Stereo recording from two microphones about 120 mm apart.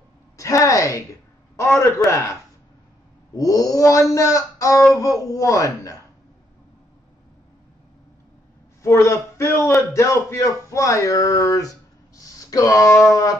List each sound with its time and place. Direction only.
0.4 s a woman's voice: 25° left (ahead or behind)
2.0 s speech: 25° left (ahead or behind)
3.3 s speech: 30° left (ahead or behind)
8.8 s speech: 25° left (ahead or behind)